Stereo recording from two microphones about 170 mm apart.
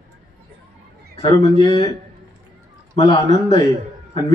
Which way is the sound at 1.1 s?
25° left (ahead or behind).